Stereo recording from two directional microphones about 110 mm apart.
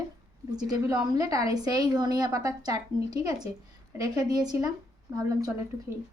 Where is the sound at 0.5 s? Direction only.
35° right (ahead or behind).